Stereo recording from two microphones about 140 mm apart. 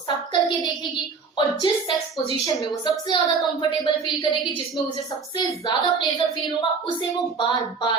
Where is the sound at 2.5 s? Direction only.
30° left (ahead or behind).